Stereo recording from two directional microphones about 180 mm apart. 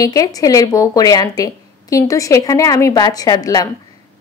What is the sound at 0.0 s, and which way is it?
A woman's voice, 20° left (ahead or behind).